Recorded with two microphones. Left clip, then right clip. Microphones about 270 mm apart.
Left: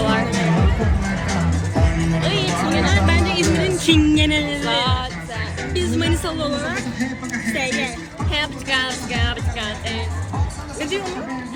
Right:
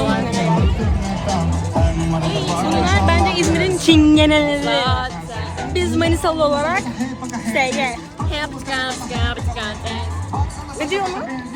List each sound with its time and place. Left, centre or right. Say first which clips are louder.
0.0 s music: even; centre
2.2 s music: left 4 dB; centre
2.8 s music: right 3 dB; centre
5.7 s a woman's voice: right 4 dB; centre
10.8 s a woman's voice: right 4 dB; centre